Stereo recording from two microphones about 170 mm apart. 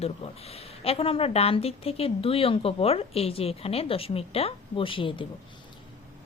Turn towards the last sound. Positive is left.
turn(degrees=30)  # may be behind; listen again after turning